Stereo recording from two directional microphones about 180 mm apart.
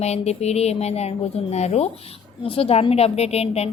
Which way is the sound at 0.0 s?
35° left (ahead or behind).